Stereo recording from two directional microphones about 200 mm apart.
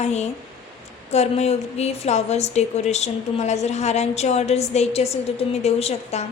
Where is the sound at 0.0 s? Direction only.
35° left (ahead or behind).